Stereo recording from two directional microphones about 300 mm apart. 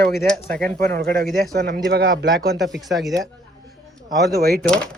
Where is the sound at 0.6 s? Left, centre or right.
Right.